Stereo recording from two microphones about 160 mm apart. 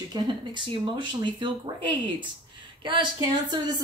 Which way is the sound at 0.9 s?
30° right (ahead or behind).